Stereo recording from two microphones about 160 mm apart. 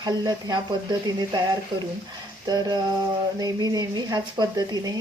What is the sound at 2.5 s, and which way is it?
A woman's voice, 25° right (ahead or behind).